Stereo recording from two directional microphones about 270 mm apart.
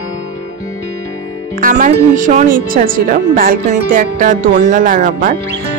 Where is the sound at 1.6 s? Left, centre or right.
Right.